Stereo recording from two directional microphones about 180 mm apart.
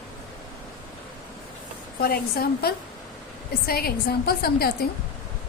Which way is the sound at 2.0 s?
55° left (ahead or behind).